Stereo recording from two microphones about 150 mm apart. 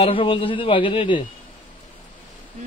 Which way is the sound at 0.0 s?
35° left (ahead or behind).